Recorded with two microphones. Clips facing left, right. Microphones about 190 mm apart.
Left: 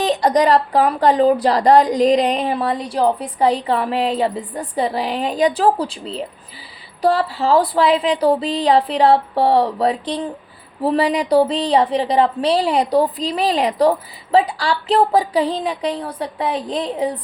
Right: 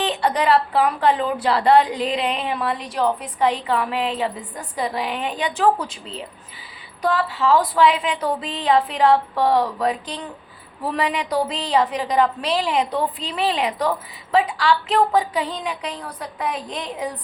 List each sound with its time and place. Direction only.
0.0 s speech: 40° left (ahead or behind)